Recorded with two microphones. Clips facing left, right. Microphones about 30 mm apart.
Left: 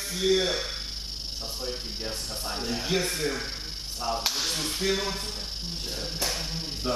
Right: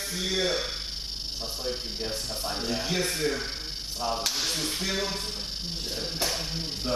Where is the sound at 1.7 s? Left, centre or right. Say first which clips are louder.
Right 4 dB; centre.